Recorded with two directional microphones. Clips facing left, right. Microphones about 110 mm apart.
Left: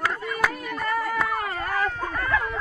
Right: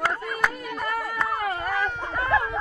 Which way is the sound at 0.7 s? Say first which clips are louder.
Left 3 dB; 20° right (ahead or behind).